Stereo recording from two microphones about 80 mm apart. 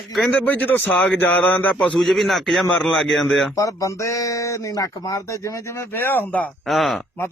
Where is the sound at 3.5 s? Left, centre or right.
Left.